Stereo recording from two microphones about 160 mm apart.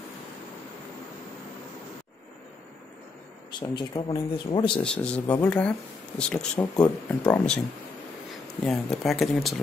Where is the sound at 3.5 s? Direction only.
30° left (ahead or behind).